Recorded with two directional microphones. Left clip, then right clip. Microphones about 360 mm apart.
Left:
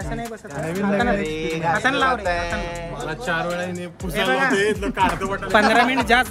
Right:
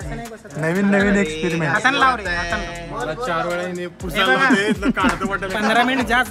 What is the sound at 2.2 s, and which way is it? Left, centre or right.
Speech, centre.